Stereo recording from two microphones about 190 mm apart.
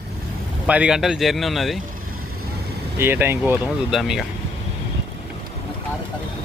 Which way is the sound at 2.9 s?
10° right (ahead or behind).